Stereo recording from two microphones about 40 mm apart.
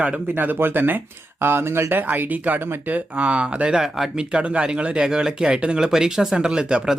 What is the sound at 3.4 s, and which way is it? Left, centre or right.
Speech, right.